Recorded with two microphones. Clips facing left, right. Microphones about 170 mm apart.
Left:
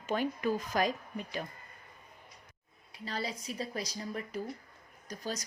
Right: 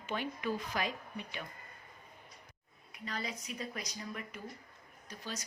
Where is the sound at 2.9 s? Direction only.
30° left (ahead or behind).